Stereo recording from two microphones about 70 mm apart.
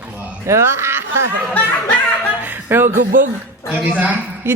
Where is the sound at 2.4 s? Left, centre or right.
Right.